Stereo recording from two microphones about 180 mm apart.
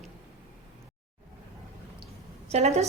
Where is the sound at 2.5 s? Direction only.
40° right (ahead or behind).